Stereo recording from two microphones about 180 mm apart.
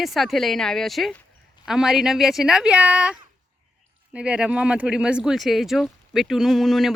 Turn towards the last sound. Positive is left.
turn(degrees=0)  # may be behind; listen again after turning